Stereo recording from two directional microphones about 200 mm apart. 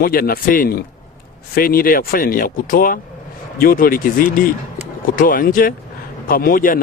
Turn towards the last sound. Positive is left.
turn(degrees=45)  # may be behind; listen again after turning